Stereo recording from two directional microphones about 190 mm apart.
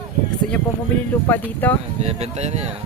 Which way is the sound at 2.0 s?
35° right (ahead or behind).